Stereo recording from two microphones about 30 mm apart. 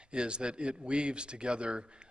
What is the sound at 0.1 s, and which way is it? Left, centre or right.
A man's voice, right.